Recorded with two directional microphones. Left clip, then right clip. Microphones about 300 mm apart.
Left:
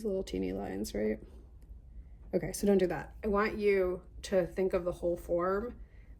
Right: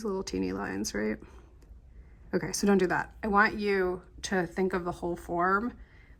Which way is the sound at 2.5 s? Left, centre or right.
Centre.